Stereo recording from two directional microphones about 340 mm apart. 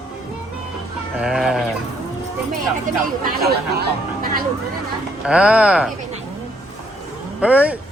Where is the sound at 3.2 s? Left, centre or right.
Right.